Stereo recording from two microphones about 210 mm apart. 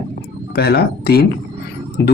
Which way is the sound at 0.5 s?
50° left (ahead or behind).